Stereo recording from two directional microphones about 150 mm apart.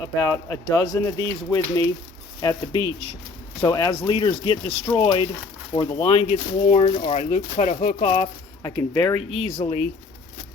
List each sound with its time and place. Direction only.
0.2 s speech: 20° left (ahead or behind)
6.2 s speech: 55° left (ahead or behind)
6.8 s speech: 35° left (ahead or behind)
7.2 s speech: 55° left (ahead or behind)
8.6 s speech: 25° left (ahead or behind)
9.1 s speech: 40° left (ahead or behind)